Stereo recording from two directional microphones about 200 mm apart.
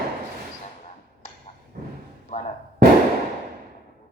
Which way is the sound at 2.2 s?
35° left (ahead or behind).